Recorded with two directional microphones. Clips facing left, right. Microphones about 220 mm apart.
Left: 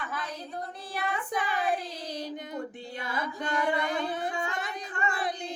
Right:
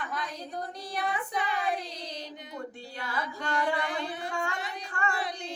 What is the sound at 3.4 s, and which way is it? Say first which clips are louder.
Music: left 1 dB; 20° left (ahead or behind).